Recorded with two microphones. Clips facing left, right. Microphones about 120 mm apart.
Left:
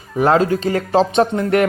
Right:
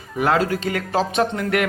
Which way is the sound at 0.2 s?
30° left (ahead or behind).